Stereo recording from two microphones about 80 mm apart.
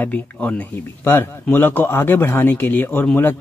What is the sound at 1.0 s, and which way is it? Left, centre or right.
Speech, left.